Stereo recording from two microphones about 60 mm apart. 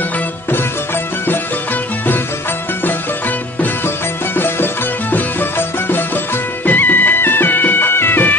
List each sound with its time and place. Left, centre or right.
5.1 s music: left